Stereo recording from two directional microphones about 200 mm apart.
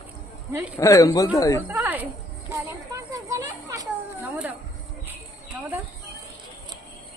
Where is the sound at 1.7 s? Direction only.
10° right (ahead or behind).